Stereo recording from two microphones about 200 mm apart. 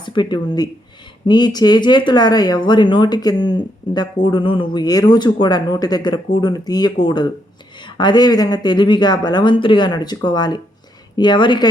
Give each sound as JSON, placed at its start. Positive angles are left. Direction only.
{"t": 0.0, "sound": "speech", "side_deg": 20}